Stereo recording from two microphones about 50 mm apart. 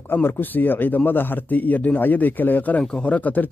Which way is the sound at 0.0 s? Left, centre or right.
Left.